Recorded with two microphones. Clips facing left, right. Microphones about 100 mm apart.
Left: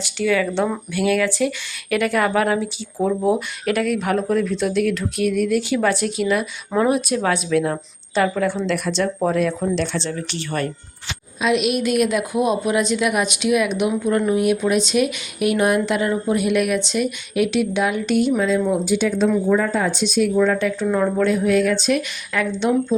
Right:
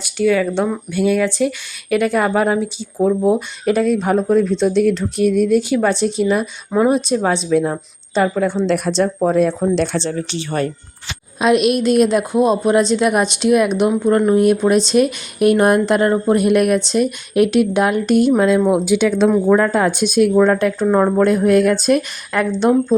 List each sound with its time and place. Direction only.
0.2 s speech: 20° right (ahead or behind)
5.5 s speech: 20° right (ahead or behind)
8.6 s speech: 40° right (ahead or behind)
11.3 s speech: 45° right (ahead or behind)
11.8 s speech: 30° right (ahead or behind)
13.9 s speech: 25° right (ahead or behind); by 18.0 s 50° right (ahead or behind)
18.3 s speech: 65° right (ahead or behind); by 19.3 s 85° right
19.5 s speech: 65° right (ahead or behind); by 23.0 s 45° right (ahead or behind)